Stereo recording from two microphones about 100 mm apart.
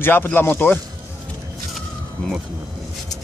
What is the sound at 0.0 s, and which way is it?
Speech, 20° left (ahead or behind).